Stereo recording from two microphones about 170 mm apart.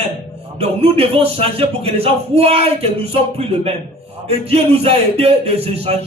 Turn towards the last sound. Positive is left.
turn(degrees=-35)  # may be behind; listen again after turning